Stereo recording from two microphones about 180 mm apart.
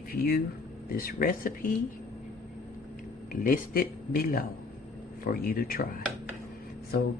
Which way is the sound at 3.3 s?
50° left (ahead or behind).